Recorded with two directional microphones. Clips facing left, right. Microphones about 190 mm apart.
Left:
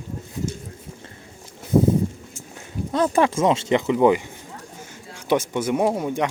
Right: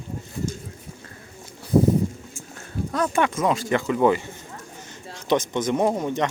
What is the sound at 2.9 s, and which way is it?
Speech, 30° left (ahead or behind).